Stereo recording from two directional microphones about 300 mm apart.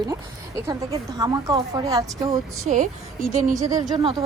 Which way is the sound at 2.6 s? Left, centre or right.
Right.